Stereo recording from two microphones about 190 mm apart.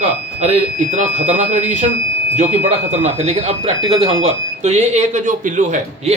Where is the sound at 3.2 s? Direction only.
35° right (ahead or behind).